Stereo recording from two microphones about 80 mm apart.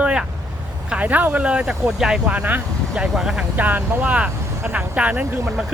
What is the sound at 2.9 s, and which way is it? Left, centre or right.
Speech, centre.